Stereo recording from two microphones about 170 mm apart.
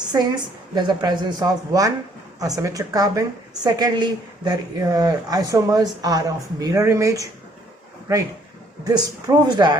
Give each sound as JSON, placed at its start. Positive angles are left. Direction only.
{"t": 0.1, "sound": "a woman's voice", "side_deg": -25}
{"t": 8.8, "sound": "a woman's voice", "side_deg": -20}